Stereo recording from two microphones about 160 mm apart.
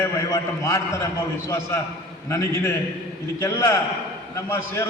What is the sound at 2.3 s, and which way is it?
A man's voice, 20° left (ahead or behind).